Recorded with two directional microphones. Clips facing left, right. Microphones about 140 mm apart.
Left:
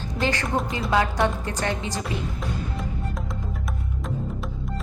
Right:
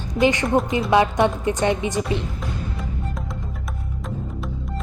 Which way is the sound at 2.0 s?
Centre (ahead or behind).